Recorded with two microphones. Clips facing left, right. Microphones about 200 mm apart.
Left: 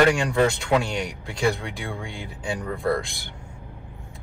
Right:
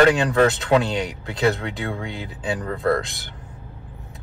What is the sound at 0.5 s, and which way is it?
Speech, 20° right (ahead or behind).